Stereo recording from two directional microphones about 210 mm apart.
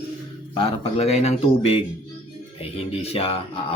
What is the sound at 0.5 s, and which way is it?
Speech, 30° left (ahead or behind).